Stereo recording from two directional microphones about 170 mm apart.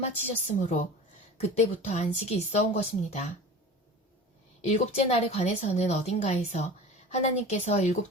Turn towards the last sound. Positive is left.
turn(degrees=40)  # may be behind; listen again after turning